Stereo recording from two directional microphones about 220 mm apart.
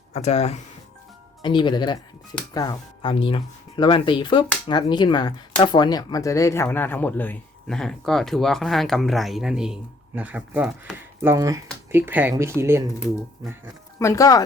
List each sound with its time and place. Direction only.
0.1 s speech: 30° left (ahead or behind); by 13.7 s 10° right (ahead or behind)
14.0 s speech: 15° left (ahead or behind)